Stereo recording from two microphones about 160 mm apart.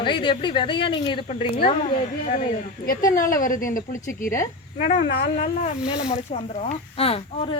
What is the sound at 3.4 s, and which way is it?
Speech, 60° left (ahead or behind).